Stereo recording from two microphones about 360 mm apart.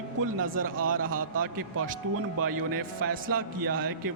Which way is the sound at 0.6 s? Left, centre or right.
Right.